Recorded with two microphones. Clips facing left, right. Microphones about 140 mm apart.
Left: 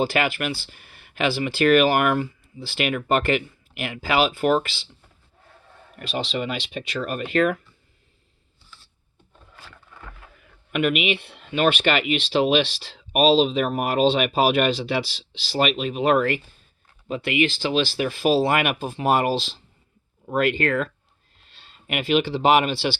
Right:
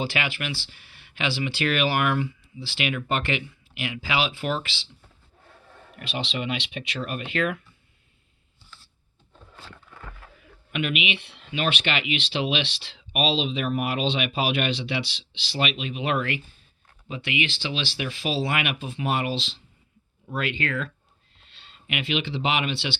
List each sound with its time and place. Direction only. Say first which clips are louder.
0.0 s speech: left 6 dB; 45° left (ahead or behind)
6.0 s speech: left 4 dB; 40° left (ahead or behind)
10.7 s speech: left 6 dB; 45° left (ahead or behind)